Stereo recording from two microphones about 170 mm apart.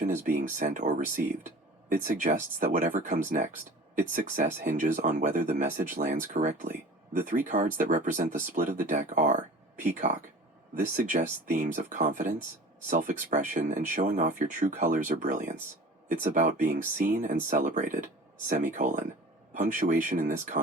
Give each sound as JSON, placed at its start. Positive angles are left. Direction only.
{"t": 0.0, "sound": "speech", "side_deg": -50}